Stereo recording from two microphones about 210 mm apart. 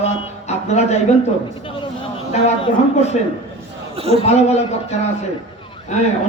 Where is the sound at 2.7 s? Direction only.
35° left (ahead or behind).